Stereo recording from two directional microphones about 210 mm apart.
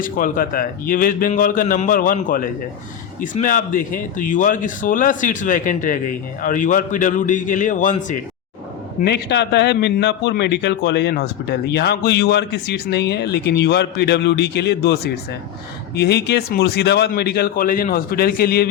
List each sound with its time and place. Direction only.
0.0 s speech: 40° left (ahead or behind)
9.0 s a man's voice: 50° left (ahead or behind)